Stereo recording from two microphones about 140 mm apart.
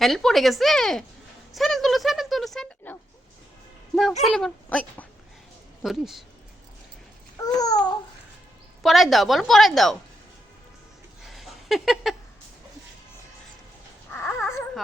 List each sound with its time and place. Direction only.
0.0 s a woman's voice: centre (ahead or behind)
4.4 s a woman's voice: 5° left (ahead or behind)
7.4 s a child's voice: 25° left (ahead or behind)
8.8 s a woman's voice: centre (ahead or behind)
11.3 s a sound: centre (ahead or behind)
14.1 s dog: 15° left (ahead or behind)